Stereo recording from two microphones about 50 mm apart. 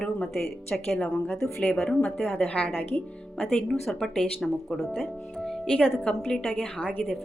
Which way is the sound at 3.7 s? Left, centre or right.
Centre.